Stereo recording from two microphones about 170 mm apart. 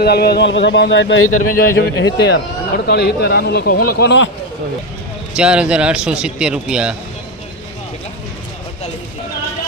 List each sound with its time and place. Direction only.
0.0 s speech: 70° left (ahead or behind)
5.4 s a man's voice: 5° right (ahead or behind)